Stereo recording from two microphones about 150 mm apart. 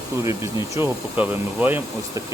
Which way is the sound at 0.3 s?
20° right (ahead or behind).